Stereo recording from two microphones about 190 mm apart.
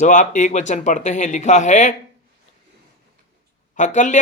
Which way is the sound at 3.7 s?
40° left (ahead or behind).